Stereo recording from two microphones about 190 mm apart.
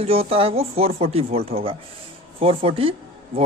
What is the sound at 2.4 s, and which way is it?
Speech, 30° right (ahead or behind).